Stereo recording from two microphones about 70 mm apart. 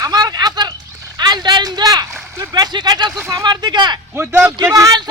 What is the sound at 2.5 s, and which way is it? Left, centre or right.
Speech, right.